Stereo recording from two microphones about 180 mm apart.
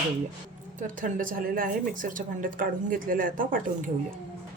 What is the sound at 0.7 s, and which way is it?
A woman's voice, 45° right (ahead or behind).